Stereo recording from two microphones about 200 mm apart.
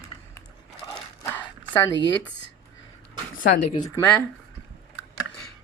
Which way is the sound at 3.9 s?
15° left (ahead or behind).